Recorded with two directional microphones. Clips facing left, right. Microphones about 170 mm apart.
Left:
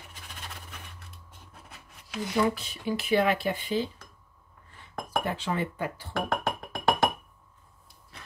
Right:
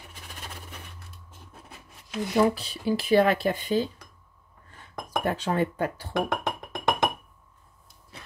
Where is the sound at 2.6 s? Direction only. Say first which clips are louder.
Right 4 dB; 35° right (ahead or behind).